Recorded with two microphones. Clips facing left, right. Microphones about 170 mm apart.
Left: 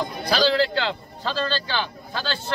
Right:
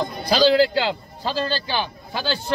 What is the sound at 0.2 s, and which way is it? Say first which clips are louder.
A man's voice: right 4 dB; 15° right (ahead or behind).